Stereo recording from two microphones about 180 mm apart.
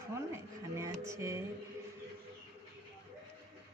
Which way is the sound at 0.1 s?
15° right (ahead or behind).